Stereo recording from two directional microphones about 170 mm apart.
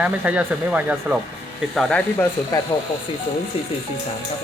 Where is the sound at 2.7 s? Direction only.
25° left (ahead or behind).